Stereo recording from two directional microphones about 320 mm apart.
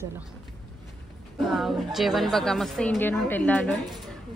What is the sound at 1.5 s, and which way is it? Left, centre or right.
A woman's voice, centre.